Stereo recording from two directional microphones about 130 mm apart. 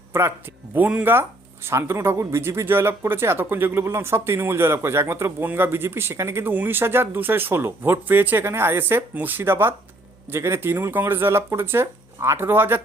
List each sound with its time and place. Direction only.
0.1 s speech: 20° right (ahead or behind)